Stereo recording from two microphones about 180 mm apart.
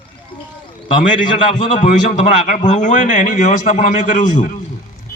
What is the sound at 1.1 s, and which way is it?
A man's voice, 45° left (ahead or behind).